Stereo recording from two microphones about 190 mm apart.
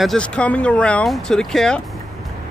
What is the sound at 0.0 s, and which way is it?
Speech, 5° left (ahead or behind).